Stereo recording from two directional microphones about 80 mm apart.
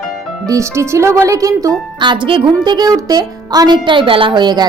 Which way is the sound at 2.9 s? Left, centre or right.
Right.